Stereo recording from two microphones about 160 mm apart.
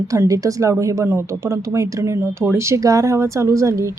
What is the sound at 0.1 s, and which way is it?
Speech, 20° right (ahead or behind).